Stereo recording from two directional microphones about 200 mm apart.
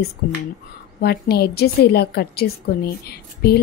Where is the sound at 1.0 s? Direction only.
55° left (ahead or behind).